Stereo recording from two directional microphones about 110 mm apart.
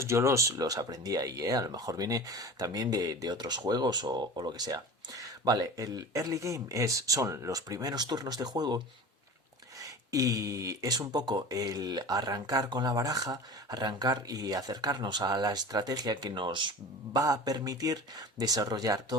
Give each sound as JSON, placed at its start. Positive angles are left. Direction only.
{"t": 0.0, "sound": "speech", "side_deg": -25}
{"t": 9.8, "sound": "speech", "side_deg": -30}
{"t": 17.2, "sound": "speech", "side_deg": -35}